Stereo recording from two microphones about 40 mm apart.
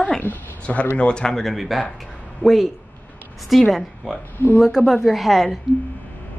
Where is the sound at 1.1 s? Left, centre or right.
Left.